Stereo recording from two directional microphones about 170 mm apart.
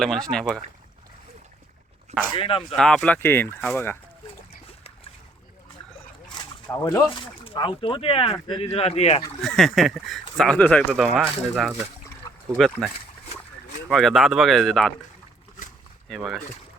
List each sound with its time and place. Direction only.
0.0 s speech: centre (ahead or behind)
2.3 s speech: 30° left (ahead or behind)
2.7 s speech: 5° left (ahead or behind)
6.2 s a sound: 25° left (ahead or behind)
7.2 s speech: 30° left (ahead or behind)
9.4 s speech: centre (ahead or behind)
12.8 s speech: centre (ahead or behind)
16.0 s speech: centre (ahead or behind)